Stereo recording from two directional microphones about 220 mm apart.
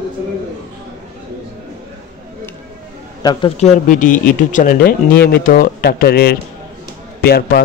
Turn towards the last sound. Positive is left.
turn(degrees=45)  # may be behind; listen again after turning